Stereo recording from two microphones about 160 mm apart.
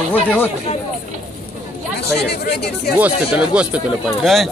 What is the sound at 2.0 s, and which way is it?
Speech, 90° left.